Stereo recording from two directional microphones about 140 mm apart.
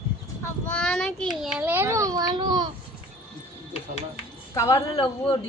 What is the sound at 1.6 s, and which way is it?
A child's voice, 15° right (ahead or behind).